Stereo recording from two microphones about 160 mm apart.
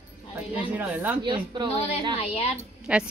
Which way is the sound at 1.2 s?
30° right (ahead or behind).